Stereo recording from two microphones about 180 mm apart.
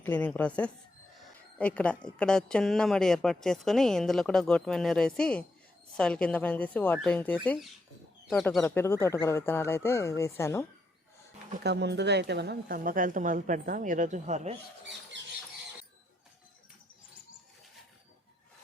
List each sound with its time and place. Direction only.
0.0 s a woman's voice: 10° left (ahead or behind)
11.6 s a woman's voice: 70° right (ahead or behind); by 14.6 s 40° right (ahead or behind)
15.1 s a sound: 80° right